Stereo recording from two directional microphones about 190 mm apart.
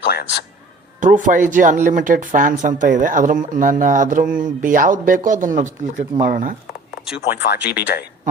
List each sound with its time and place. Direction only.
0.1 s a man's voice: 55° left (ahead or behind)
1.0 s speech: 40° right (ahead or behind)
7.0 s speech: 5° right (ahead or behind)
7.9 s speech: 50° left (ahead or behind)